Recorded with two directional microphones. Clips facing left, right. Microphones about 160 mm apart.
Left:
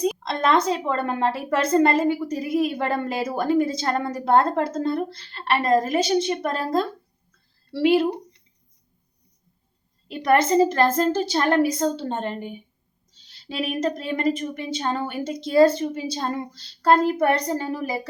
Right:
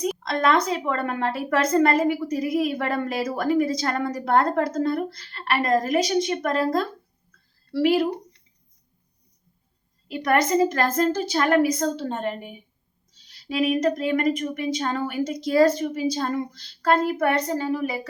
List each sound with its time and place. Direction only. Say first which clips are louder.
0.0 s a woman's voice: even; 25° left (ahead or behind)
10.1 s a woman's voice: left 2 dB; 30° left (ahead or behind)
13.7 s a woman's voice: right 3 dB; 30° left (ahead or behind)